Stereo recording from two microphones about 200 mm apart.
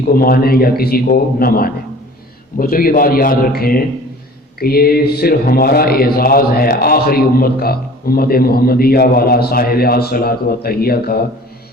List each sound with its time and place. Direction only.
0.1 s speech: 50° left (ahead or behind)